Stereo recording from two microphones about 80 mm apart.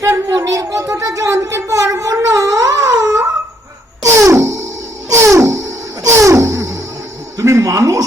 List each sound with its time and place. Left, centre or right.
0.0 s a woman's voice: right
4.1 s music: right
7.3 s a sound: right